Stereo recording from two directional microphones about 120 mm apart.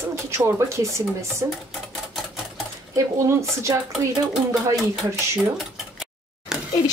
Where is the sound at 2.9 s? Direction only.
25° right (ahead or behind).